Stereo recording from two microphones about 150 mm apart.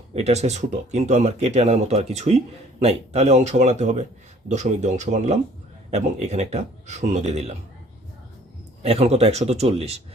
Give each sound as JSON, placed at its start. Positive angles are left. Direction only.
{"t": 0.1, "sound": "speech", "side_deg": -45}
{"t": 8.8, "sound": "speech", "side_deg": -45}